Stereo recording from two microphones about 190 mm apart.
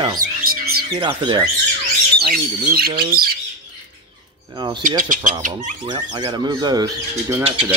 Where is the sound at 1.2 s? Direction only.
25° right (ahead or behind).